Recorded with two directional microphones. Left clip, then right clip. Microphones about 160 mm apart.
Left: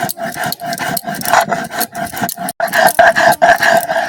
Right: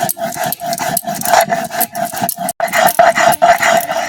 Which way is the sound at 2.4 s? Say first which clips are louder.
Left 1 dB; 20° left (ahead or behind).